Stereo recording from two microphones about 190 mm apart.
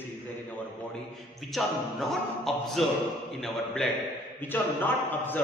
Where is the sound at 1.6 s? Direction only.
Centre (ahead or behind).